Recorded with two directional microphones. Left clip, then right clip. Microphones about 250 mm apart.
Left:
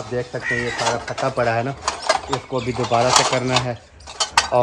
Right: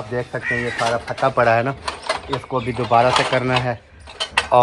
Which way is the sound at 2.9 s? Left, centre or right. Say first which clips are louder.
Right 1 dB; centre.